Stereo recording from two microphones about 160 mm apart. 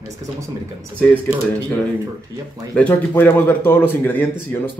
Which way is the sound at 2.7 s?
10° left (ahead or behind).